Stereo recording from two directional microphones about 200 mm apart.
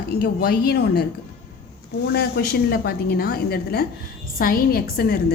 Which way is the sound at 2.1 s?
50° left (ahead or behind).